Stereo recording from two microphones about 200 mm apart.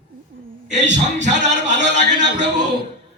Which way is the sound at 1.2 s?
35° right (ahead or behind).